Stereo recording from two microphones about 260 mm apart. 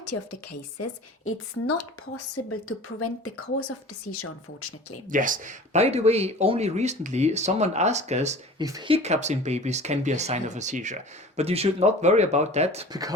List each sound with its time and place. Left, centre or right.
0.1 s a woman's voice: left
5.0 s speech: right
8.6 s speech: centre